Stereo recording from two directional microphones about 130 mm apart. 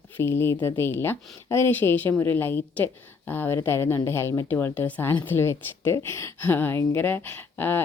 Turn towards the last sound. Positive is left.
turn(degrees=15)  # may be behind; listen again after turning